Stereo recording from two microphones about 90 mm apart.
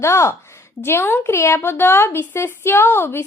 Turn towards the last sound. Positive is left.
turn(degrees=25)  # may be behind; listen again after turning